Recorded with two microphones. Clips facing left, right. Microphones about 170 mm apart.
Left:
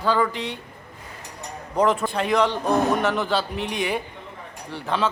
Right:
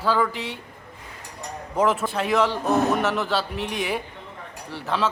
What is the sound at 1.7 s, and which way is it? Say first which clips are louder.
A man's voice: left 1 dB; 5° right (ahead or behind).